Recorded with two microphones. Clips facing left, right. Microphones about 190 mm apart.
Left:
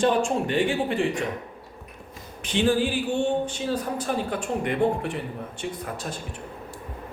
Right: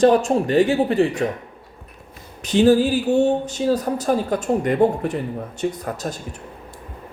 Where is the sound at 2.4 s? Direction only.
40° right (ahead or behind).